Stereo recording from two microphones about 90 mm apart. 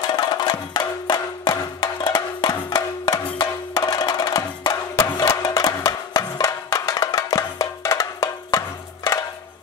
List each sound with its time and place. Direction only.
0.0 s music: 50° left (ahead or behind)